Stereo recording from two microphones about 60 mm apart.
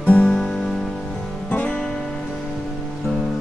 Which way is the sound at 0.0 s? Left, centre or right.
Left.